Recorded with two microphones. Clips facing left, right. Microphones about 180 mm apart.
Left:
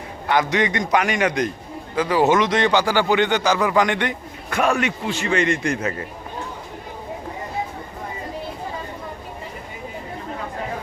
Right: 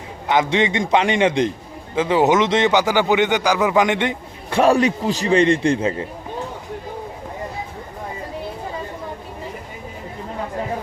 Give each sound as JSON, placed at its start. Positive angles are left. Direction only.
{"t": 0.3, "sound": "speech", "side_deg": -25}